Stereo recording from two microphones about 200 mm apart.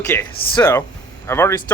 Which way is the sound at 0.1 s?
25° left (ahead or behind).